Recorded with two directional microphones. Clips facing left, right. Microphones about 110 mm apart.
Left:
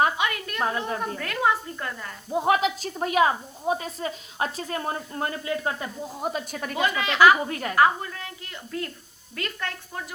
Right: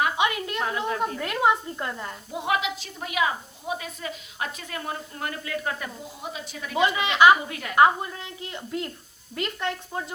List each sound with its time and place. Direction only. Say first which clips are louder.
0.2 s a sound: right 3 dB; 20° right (ahead or behind)
0.9 s speech: right 2 dB; 20° right (ahead or behind)
2.3 s a woman's voice: left 5 dB; 40° left (ahead or behind)
6.2 s a woman's voice: left 6 dB; 50° left (ahead or behind)
6.7 s speech: right 1 dB; 20° right (ahead or behind)
7.4 s a woman's voice: left 5 dB; 40° left (ahead or behind)
7.8 s speech: right 2 dB; 20° right (ahead or behind)